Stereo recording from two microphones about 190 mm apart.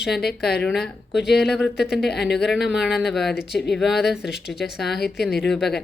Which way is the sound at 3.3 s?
60° left (ahead or behind).